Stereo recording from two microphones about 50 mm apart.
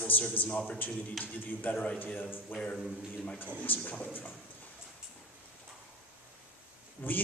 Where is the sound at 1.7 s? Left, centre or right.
Left.